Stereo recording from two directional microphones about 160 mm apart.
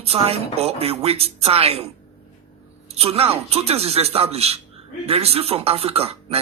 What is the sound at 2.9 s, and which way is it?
Speech, 40° right (ahead or behind).